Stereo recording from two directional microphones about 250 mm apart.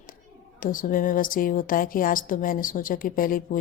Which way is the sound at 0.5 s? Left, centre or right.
Left.